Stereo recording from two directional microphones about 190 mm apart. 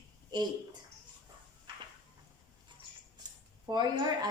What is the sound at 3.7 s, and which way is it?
Speech, 20° right (ahead or behind).